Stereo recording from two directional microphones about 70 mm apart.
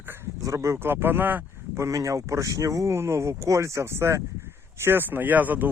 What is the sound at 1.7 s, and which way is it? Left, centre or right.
A man's voice, right.